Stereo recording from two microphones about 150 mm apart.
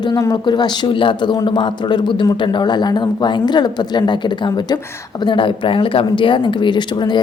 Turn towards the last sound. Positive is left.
turn(degrees=30)  # may be behind; listen again after turning